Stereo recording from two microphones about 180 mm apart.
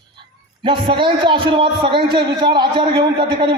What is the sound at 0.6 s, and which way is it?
A man's voice, 30° right (ahead or behind).